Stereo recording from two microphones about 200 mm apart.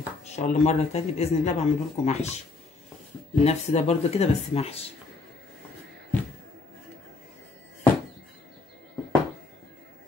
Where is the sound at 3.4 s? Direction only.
30° left (ahead or behind).